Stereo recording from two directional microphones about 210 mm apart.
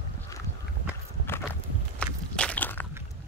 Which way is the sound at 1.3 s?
10° left (ahead or behind).